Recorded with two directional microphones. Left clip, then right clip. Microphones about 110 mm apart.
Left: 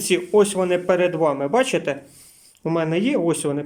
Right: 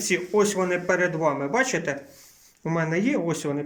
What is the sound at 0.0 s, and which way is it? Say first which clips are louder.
Speech: left 5 dB; 15° left (ahead or behind).